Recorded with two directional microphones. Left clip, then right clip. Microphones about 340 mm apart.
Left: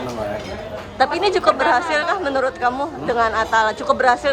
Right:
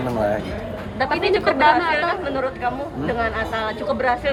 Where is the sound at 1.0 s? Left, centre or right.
Centre.